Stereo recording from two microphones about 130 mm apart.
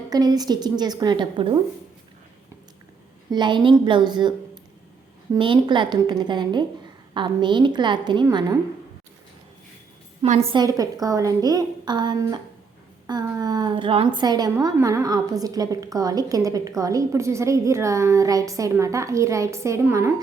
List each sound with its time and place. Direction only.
0.1 s a woman's voice: 30° right (ahead or behind)
3.2 s a woman's voice: 35° right (ahead or behind)
10.5 s a woman's voice: 30° right (ahead or behind)